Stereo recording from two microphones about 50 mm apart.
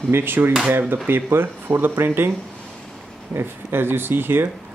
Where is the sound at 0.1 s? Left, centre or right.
Right.